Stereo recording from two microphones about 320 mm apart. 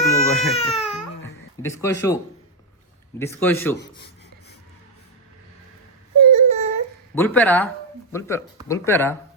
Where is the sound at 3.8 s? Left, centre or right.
Left.